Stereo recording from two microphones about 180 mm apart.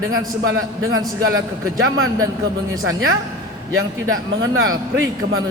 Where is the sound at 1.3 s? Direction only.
90° right.